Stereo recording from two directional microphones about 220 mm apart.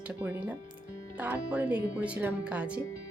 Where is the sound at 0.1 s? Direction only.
10° right (ahead or behind).